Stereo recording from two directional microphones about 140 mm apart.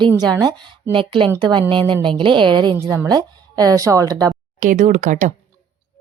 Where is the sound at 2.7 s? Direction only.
20° right (ahead or behind).